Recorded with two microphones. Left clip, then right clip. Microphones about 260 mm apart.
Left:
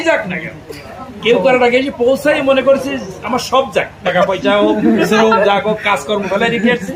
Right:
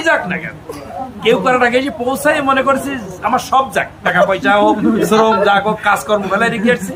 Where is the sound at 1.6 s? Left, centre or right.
Centre.